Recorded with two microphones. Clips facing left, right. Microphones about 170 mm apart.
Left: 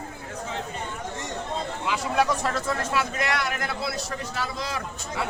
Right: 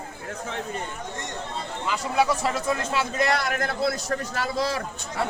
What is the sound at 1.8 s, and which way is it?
Speech, centre (ahead or behind).